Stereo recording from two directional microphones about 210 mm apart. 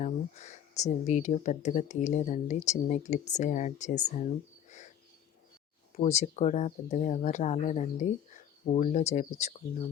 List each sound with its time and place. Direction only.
0.0 s speech: 35° left (ahead or behind)
6.0 s speech: 35° left (ahead or behind)